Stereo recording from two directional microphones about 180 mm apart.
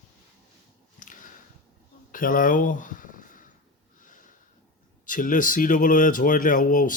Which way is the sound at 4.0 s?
45° left (ahead or behind).